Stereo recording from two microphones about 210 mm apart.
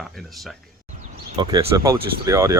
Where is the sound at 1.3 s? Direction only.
20° right (ahead or behind).